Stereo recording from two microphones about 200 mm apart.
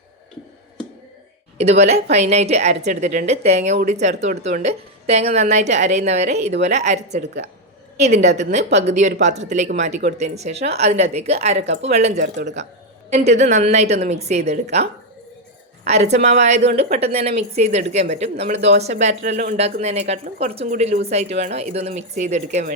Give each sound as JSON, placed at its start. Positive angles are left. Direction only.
{"t": 1.5, "sound": "a woman's voice", "side_deg": -30}